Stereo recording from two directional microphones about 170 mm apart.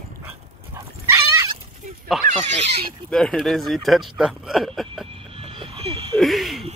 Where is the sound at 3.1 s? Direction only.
5° left (ahead or behind).